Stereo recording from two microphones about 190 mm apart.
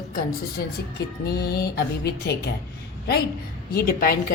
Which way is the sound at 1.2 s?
55° left (ahead or behind).